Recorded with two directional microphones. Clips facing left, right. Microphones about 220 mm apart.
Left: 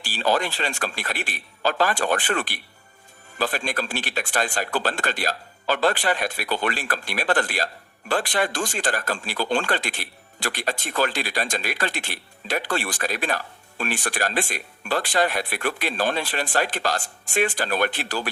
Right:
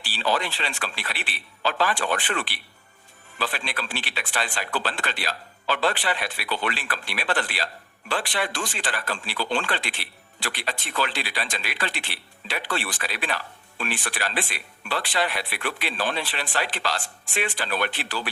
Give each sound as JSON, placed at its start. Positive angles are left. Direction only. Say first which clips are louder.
{"t": 0.0, "sound": "speech", "louder": "left 3 dB", "side_deg": 45}